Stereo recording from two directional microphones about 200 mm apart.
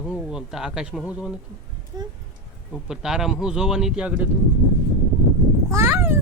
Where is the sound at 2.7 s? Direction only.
5° right (ahead or behind).